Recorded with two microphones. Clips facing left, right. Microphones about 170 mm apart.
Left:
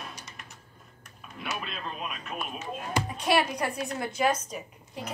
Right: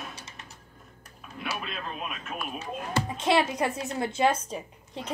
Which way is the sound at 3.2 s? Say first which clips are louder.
Right 2 dB; 25° right (ahead or behind).